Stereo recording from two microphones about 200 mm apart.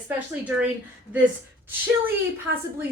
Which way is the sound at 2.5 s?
60° right (ahead or behind).